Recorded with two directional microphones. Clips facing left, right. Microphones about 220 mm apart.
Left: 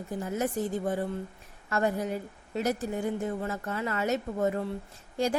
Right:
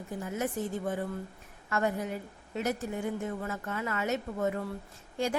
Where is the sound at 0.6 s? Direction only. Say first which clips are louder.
Left 3 dB; 35° left (ahead or behind).